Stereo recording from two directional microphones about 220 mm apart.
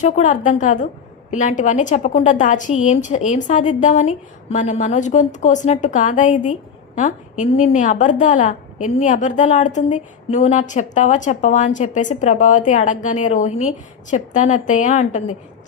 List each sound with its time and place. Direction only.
0.0 s a woman's voice: 35° left (ahead or behind)